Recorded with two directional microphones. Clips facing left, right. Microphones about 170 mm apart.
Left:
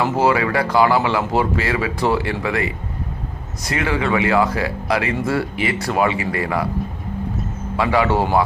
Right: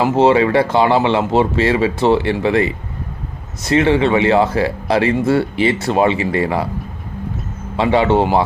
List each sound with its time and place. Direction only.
0.0 s speech: 25° right (ahead or behind)
7.8 s speech: 25° right (ahead or behind)